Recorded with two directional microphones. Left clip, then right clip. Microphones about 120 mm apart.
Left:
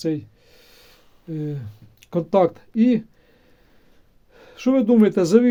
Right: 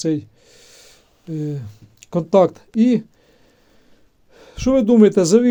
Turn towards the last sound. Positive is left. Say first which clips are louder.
# right 3 dB
turn(degrees=-40)  # may be behind; listen again after turning